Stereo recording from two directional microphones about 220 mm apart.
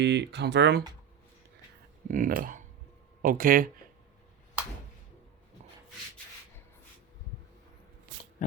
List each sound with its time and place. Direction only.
0.0 s speech: 50° right (ahead or behind)
2.0 s speech: 35° right (ahead or behind)
8.4 s a sound: 35° left (ahead or behind)